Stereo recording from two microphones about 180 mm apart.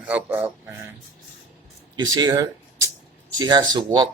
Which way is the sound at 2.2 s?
20° right (ahead or behind).